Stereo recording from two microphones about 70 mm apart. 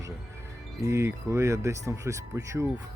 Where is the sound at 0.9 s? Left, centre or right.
Right.